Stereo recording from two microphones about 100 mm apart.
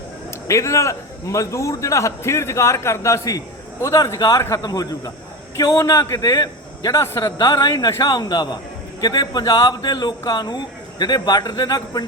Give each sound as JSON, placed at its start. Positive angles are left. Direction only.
{"t": 0.3, "sound": "a man's voice", "side_deg": 30}